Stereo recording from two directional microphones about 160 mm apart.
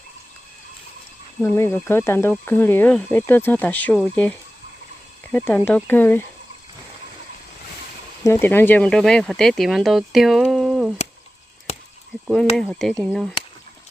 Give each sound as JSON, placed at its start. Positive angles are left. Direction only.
{"t": 1.4, "sound": "speech", "side_deg": 15}
{"t": 8.2, "sound": "speech", "side_deg": 15}
{"t": 12.3, "sound": "speech", "side_deg": 5}